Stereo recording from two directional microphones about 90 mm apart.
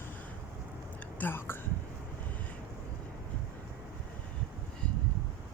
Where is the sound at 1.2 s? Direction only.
25° left (ahead or behind).